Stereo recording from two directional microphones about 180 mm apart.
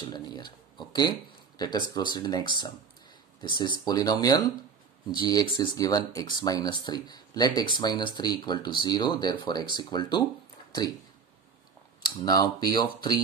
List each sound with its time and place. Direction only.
0.0 s a sound: 25° left (ahead or behind)
1.6 s speech: 25° left (ahead or behind)
12.0 s speech: 25° left (ahead or behind)